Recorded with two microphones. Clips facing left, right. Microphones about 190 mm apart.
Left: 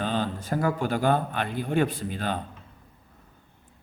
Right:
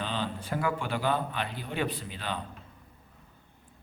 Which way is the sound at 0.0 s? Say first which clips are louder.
Left 5 dB; 45° left (ahead or behind).